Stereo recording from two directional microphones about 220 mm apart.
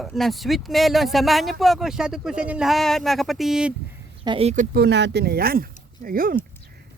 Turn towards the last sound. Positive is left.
turn(degrees=-40)  # may be behind; listen again after turning